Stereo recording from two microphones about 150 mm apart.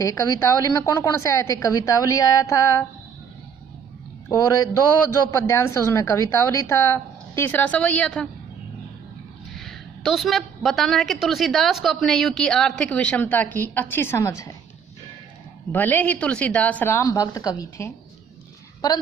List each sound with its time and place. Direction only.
0.0 s a man's voice: 25° left (ahead or behind)
4.3 s a man's voice: 25° left (ahead or behind); by 8.3 s 5° left (ahead or behind)
9.5 s a woman's voice: centre (ahead or behind); by 14.5 s 20° left (ahead or behind)
15.7 s a woman's voice: 10° left (ahead or behind)